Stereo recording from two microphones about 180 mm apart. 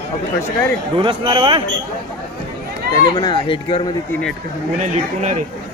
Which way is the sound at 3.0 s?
25° left (ahead or behind).